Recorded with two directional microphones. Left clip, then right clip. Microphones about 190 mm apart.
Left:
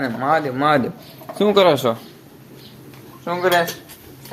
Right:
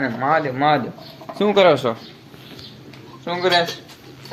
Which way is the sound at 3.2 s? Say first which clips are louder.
Left 1 dB; 15° left (ahead or behind).